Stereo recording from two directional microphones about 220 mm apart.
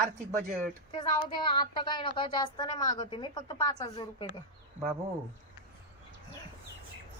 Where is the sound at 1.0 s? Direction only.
20° left (ahead or behind).